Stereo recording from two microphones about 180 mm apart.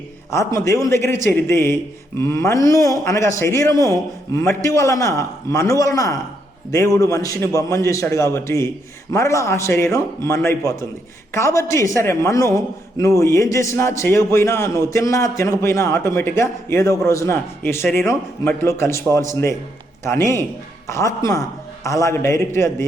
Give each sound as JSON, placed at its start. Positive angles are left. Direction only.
{"t": 0.3, "sound": "a man's voice", "side_deg": 15}
{"t": 20.8, "sound": "a man's voice", "side_deg": 15}